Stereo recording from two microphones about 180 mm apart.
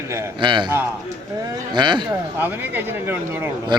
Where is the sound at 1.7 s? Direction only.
25° right (ahead or behind).